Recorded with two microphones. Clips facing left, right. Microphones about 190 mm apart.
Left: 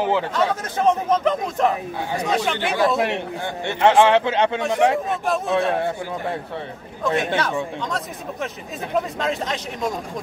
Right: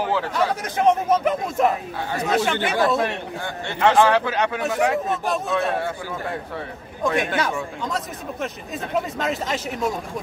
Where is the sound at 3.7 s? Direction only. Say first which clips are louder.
Left 2 dB; 25° left (ahead or behind).